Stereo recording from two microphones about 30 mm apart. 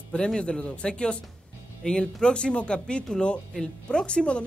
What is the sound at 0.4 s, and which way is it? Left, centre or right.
Speech, left.